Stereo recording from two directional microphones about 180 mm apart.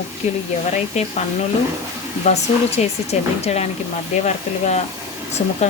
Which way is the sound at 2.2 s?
35° left (ahead or behind).